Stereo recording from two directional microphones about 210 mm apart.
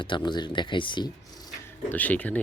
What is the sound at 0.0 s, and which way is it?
Speech, 20° left (ahead or behind).